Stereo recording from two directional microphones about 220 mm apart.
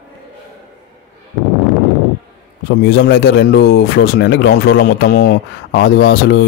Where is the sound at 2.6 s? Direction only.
50° left (ahead or behind).